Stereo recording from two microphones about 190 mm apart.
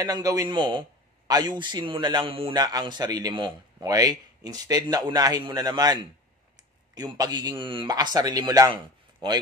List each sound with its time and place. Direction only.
0.0 s a man's voice: 20° right (ahead or behind)